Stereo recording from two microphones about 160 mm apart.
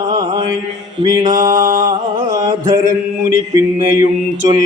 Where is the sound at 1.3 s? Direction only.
55° right (ahead or behind).